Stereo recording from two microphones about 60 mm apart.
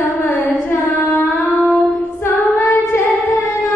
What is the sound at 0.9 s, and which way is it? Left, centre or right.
Carnatic music, left.